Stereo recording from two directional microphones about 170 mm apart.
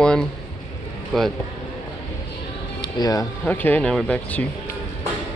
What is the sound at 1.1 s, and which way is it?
Speech, centre (ahead or behind).